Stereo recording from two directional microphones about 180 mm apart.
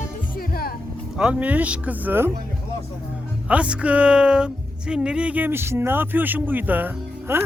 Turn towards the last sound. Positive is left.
turn(degrees=-10)  # may be behind; listen again after turning